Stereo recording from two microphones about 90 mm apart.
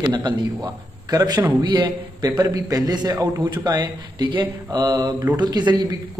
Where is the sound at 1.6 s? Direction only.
55° right (ahead or behind).